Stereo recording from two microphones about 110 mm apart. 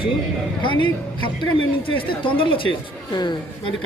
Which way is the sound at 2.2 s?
50° left (ahead or behind).